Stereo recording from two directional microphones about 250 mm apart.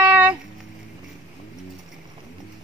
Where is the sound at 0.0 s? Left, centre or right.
Centre.